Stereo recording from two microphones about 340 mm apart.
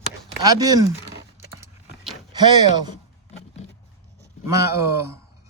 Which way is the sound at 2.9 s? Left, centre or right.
Centre.